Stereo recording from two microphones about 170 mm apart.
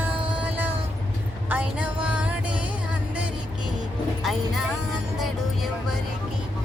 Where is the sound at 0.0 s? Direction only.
10° right (ahead or behind).